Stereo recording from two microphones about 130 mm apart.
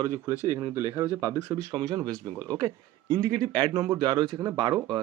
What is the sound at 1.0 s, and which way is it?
Speech, 20° right (ahead or behind).